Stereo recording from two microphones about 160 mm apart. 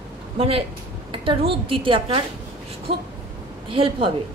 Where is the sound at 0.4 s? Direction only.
35° right (ahead or behind).